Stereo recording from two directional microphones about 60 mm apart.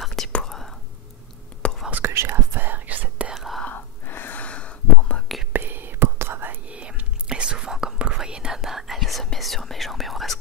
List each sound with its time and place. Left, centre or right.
0.0 s whispering: centre
1.6 s whispering: centre
2.0 s whispering: right
3.3 s whispering: centre
3.7 s whispering: left; by 5.2 s centre
5.5 s whispering: right
6.7 s whispering: right; by 10.3 s centre